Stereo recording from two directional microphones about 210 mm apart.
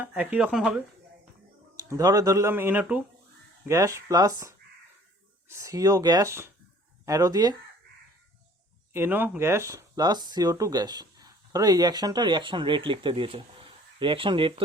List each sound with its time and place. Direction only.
0.0 s speech: 5° right (ahead or behind)
1.7 s speech: 15° right (ahead or behind)
8.9 s speech: 10° right (ahead or behind)